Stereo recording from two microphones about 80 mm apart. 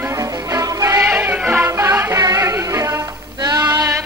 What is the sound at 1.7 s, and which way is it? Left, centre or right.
Music, right.